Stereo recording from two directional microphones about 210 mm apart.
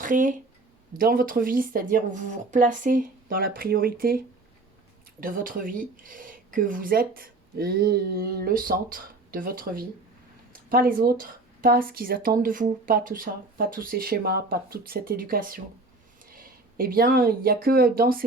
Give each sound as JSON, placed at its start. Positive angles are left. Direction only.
{"t": 0.0, "sound": "speech", "side_deg": -40}
{"t": 5.2, "sound": "speech", "side_deg": -40}